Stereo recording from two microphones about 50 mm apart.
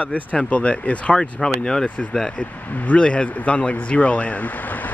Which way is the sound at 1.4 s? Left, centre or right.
Centre.